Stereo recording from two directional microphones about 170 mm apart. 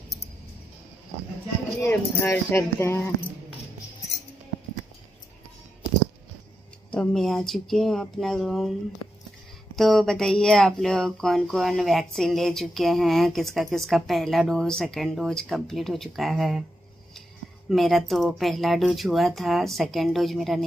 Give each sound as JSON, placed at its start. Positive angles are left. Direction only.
{"t": 1.8, "sound": "speech", "side_deg": 15}
{"t": 6.9, "sound": "speech", "side_deg": 5}
{"t": 9.8, "sound": "speech", "side_deg": 0}
{"t": 17.6, "sound": "speech", "side_deg": 0}